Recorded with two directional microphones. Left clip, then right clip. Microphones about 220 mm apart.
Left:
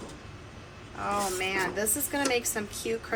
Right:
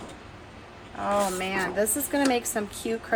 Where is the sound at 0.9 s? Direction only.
20° right (ahead or behind).